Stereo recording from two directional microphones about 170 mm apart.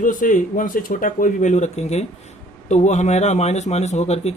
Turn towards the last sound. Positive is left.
turn(degrees=40)  # may be behind; listen again after turning